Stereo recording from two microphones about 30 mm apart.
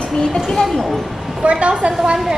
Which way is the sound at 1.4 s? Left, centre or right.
Right.